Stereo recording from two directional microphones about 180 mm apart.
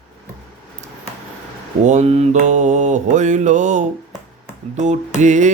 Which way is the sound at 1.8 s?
40° right (ahead or behind).